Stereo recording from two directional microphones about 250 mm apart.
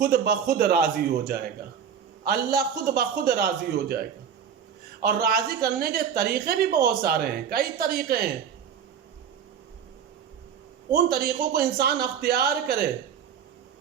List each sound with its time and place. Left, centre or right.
0.0 s a man's voice: right
5.0 s a man's voice: right
10.9 s a man's voice: right